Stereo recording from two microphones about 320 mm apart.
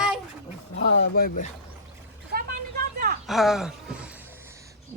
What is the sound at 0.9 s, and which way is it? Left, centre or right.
Speech, left.